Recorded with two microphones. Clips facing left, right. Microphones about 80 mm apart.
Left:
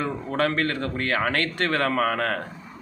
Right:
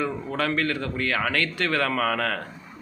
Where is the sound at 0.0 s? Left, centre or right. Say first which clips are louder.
Left 2 dB; left.